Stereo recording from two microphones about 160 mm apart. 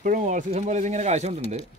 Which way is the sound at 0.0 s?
55° right (ahead or behind).